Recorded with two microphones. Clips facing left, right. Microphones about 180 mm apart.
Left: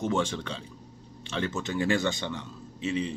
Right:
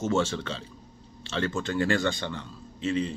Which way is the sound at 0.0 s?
15° left (ahead or behind).